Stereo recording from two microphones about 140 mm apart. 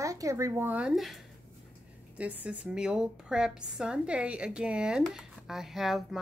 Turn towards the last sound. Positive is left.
turn(degrees=0)  # may be behind; listen again after turning